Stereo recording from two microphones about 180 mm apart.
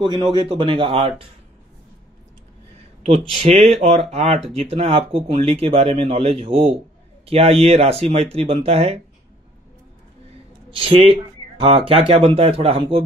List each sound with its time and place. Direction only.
0.0 s speech: 25° right (ahead or behind)
3.0 s speech: 30° right (ahead or behind)
10.7 s speech: 30° right (ahead or behind)